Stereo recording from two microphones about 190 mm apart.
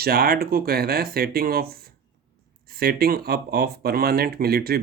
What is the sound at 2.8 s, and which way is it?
Speech, 55° right (ahead or behind).